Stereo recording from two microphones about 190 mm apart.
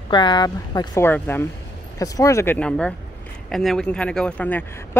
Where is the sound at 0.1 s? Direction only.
25° left (ahead or behind).